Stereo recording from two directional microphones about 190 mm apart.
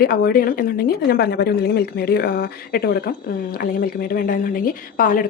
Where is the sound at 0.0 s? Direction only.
50° left (ahead or behind).